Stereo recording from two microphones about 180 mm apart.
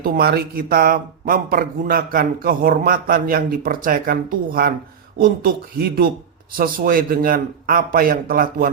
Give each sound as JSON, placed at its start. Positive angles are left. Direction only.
{"t": 0.0, "sound": "a man's voice", "side_deg": -55}